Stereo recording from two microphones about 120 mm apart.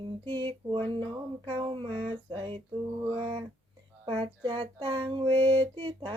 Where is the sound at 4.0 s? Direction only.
50° right (ahead or behind).